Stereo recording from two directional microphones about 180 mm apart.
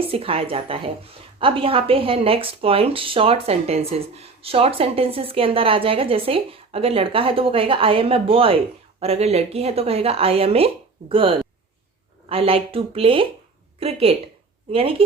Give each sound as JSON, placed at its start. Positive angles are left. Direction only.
{"t": 0.1, "sound": "speech", "side_deg": -30}